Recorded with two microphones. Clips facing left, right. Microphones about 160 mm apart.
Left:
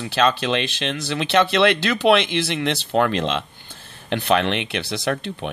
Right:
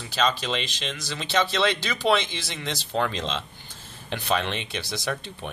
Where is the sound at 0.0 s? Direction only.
65° left (ahead or behind).